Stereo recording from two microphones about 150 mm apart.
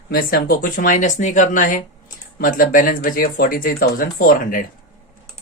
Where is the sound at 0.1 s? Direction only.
75° left (ahead or behind).